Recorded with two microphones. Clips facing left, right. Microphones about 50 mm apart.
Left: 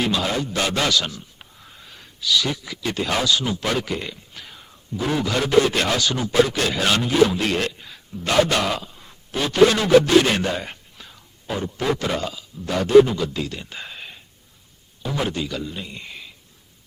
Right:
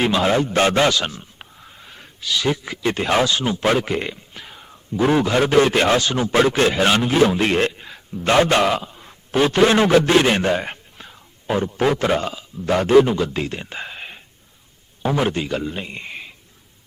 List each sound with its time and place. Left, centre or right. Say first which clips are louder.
0.0 s a man's voice: right 5 dB; right
1.5 s a sound: right 2 dB; centre
1.9 s a man's voice: left 3 dB; right
4.4 s whispering: right 2 dB; centre
4.9 s a man's voice: right 6 dB; right